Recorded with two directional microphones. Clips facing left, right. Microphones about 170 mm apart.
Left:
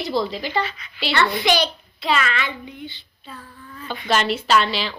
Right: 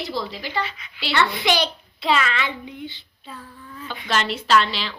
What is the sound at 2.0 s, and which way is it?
Child singing, 20° right (ahead or behind).